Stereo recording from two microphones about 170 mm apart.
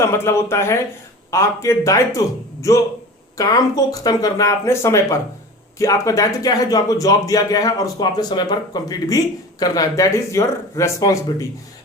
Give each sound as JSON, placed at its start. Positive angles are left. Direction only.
{"t": 0.0, "sound": "a man's voice", "side_deg": 15}